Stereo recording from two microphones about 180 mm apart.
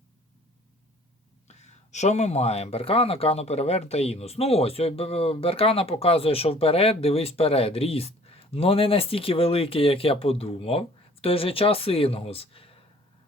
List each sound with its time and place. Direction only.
1.5 s speech: 40° left (ahead or behind)